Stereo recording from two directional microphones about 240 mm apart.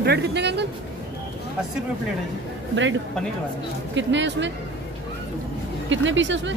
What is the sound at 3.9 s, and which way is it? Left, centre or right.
Speech, right.